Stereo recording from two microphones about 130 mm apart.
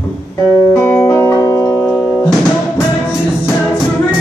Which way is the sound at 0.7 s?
15° left (ahead or behind).